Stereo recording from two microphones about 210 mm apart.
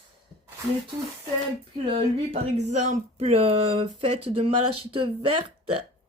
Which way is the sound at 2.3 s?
30° right (ahead or behind).